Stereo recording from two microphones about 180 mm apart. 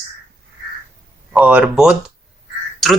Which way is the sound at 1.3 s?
10° right (ahead or behind).